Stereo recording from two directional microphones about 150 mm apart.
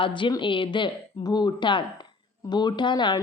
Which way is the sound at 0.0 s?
35° left (ahead or behind).